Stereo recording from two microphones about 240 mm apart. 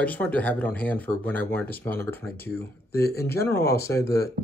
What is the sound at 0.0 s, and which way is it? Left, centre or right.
Speech, centre.